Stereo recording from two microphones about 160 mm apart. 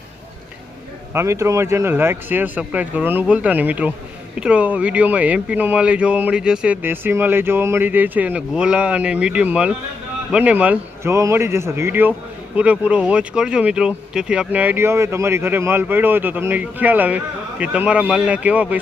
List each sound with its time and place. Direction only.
1.1 s speech: 15° right (ahead or behind)